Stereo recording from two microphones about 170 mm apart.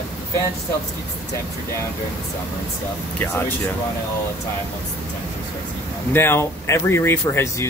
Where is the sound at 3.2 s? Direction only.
10° left (ahead or behind).